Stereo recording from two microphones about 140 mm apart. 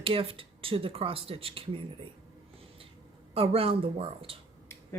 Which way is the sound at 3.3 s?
45° right (ahead or behind).